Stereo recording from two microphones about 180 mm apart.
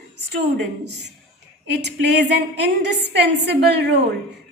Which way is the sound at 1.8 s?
70° right (ahead or behind).